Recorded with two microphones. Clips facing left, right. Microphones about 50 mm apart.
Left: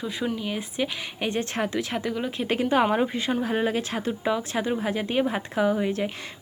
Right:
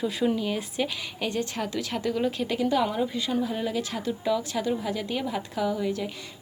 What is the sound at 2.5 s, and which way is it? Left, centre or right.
Speech, left.